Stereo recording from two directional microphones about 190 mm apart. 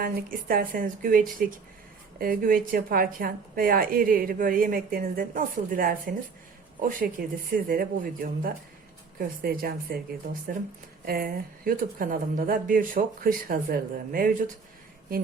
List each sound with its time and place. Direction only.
0.0 s a woman's voice: 50° right (ahead or behind)
7.2 s a woman's voice: 50° right (ahead or behind)
11.0 s a woman's voice: 50° right (ahead or behind)